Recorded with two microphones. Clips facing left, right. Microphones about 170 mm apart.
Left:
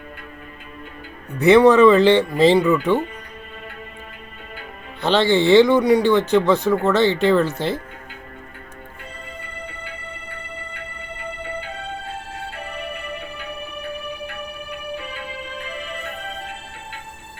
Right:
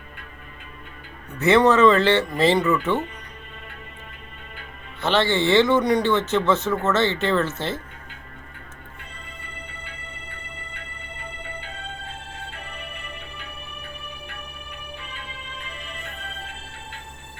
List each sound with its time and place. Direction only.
1.4 s speech: 15° left (ahead or behind)
4.9 s speech: 15° left (ahead or behind)
12.5 s music: 40° left (ahead or behind)